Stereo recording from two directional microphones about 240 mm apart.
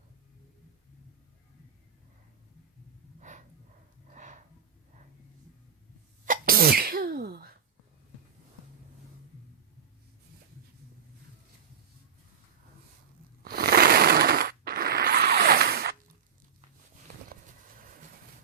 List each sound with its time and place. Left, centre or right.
3.2 s gasp: right
4.1 s snort: right
6.2 s sneeze: right
13.4 s a sound: right